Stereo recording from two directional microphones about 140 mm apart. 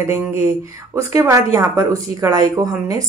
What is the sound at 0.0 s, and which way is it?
A woman's voice, 20° right (ahead or behind).